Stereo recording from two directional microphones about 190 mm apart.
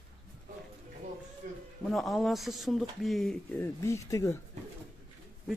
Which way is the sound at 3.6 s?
15° left (ahead or behind).